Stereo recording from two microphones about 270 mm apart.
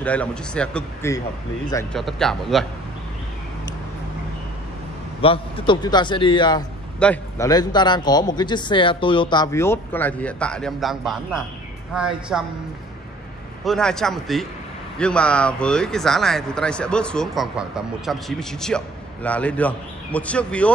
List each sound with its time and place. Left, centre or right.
0.0 s a man's voice: centre
5.2 s a man's voice: centre
13.7 s speech: centre